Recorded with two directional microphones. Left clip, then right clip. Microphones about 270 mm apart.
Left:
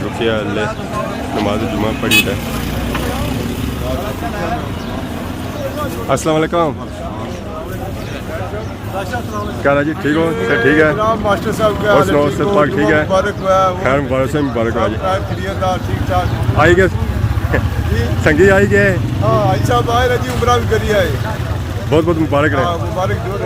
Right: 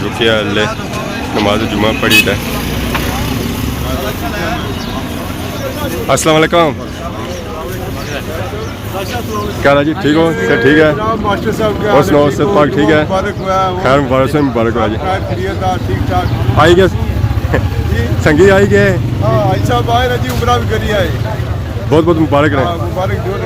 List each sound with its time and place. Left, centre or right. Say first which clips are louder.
0.2 s speech: right 5 dB; centre
6.1 s speech: right 6 dB; centre
9.6 s speech: right 4 dB; centre
11.0 s speech: even; centre
11.9 s speech: right 3 dB; centre
13.1 s speech: left 1 dB; centre
13.8 s speech: right 4 dB; centre
15.6 s speech: left 1 dB; centre
16.6 s speech: right 3 dB; centre
18.2 s speech: right 3 dB; centre
19.5 s speech: right 2 dB; centre
21.8 s speech: right 4 dB; centre